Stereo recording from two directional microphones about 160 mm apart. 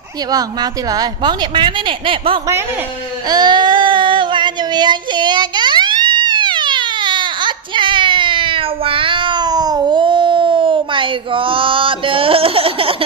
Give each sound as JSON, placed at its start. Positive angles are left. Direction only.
{"t": 0.3, "sound": "a woman's voice", "side_deg": -25}
{"t": 3.3, "sound": "child singing", "side_deg": -25}